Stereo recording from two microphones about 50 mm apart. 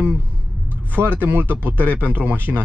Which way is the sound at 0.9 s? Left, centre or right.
Right.